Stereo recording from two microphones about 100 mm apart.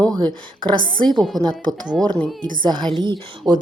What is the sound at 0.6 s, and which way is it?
Speech, 55° right (ahead or behind).